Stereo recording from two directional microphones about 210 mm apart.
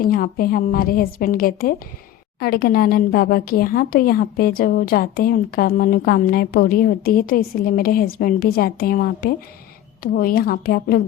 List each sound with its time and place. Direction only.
0.0 s a woman's voice: 45° left (ahead or behind)